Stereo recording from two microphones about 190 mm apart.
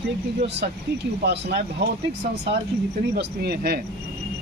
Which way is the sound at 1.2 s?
60° right (ahead or behind).